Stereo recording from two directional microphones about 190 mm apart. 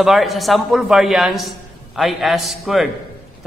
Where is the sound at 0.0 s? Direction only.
Centre (ahead or behind).